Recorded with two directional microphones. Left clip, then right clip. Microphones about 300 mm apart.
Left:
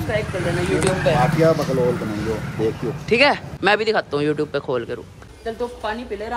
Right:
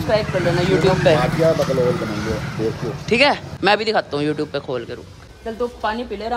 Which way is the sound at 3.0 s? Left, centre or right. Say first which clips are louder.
Even; centre.